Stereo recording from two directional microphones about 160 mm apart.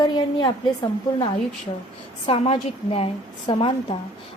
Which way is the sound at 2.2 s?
35° left (ahead or behind).